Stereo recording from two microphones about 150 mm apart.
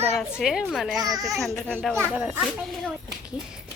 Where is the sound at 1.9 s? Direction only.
10° right (ahead or behind).